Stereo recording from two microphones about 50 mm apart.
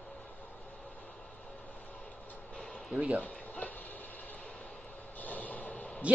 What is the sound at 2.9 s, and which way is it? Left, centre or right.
Speech, right.